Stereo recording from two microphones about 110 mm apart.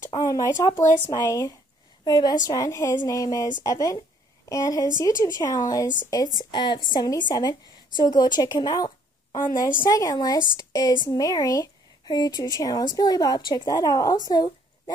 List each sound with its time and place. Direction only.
0.2 s speech: 30° left (ahead or behind)
6.5 s a woman's voice: 45° left (ahead or behind)